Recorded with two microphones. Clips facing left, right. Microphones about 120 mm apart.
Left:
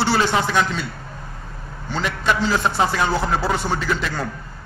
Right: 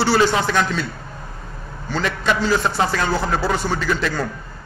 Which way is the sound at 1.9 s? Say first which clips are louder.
Right 1 dB; 15° left (ahead or behind).